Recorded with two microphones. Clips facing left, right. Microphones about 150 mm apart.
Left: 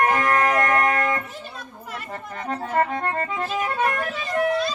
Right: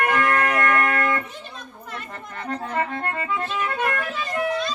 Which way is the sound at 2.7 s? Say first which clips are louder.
Left 5 dB; 40° left (ahead or behind).